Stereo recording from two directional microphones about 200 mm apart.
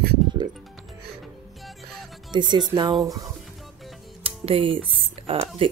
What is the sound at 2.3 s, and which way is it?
Speech, 20° right (ahead or behind).